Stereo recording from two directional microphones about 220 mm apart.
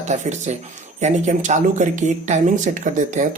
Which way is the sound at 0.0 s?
30° right (ahead or behind).